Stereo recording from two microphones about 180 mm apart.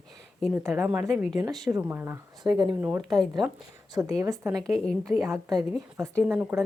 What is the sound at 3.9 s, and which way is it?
Speech, 15° right (ahead or behind).